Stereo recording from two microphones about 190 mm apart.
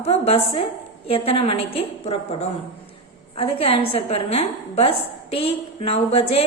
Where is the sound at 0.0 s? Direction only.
30° left (ahead or behind).